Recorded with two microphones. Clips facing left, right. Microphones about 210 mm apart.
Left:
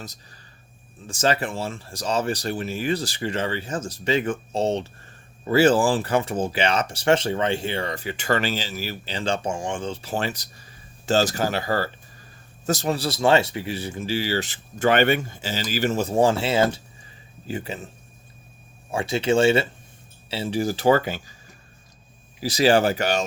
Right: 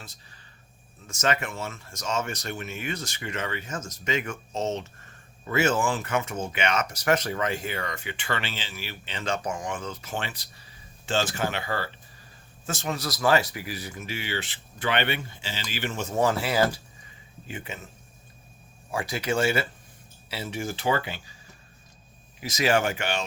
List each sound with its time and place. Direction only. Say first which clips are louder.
1.0 s speech: left 4 dB; 30° left (ahead or behind)
17.4 s speech: left 7 dB; 35° left (ahead or behind)
18.9 s speech: left 6 dB; 25° left (ahead or behind); by 21.3 s 45° left (ahead or behind)
22.4 s speech: left 6 dB; 35° left (ahead or behind)